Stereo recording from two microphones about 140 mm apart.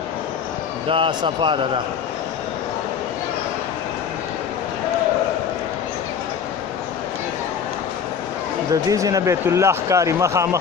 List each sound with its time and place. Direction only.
0.9 s a man's voice: 40° right (ahead or behind)
8.7 s speech: 25° right (ahead or behind)